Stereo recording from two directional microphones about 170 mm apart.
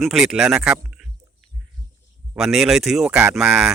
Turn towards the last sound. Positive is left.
turn(degrees=-5)  # may be behind; listen again after turning